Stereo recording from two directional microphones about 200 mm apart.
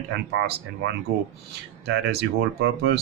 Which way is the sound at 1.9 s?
55° right (ahead or behind).